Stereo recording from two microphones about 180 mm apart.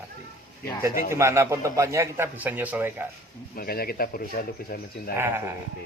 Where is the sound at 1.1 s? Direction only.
15° right (ahead or behind).